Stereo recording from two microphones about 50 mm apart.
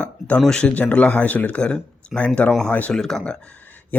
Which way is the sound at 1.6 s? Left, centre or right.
Centre.